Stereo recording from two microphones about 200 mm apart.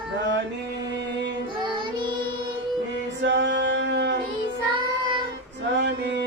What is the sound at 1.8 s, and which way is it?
Child singing, 25° right (ahead or behind).